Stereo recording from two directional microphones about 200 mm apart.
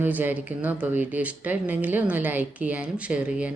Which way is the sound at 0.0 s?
10° right (ahead or behind).